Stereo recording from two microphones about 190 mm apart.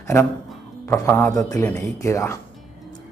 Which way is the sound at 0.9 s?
10° left (ahead or behind).